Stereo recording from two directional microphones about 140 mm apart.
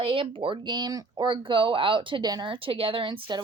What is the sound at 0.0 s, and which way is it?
Speech, 40° right (ahead or behind).